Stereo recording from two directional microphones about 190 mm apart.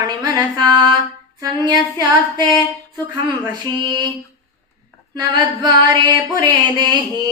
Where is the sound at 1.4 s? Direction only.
20° right (ahead or behind).